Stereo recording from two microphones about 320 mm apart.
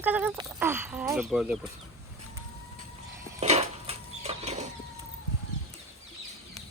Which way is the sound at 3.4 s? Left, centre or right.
Centre.